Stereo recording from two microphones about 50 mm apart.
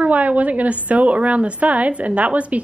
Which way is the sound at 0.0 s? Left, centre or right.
Right.